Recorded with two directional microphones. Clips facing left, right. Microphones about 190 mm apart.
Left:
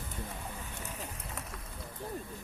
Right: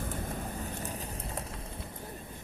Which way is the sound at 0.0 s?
50° right (ahead or behind).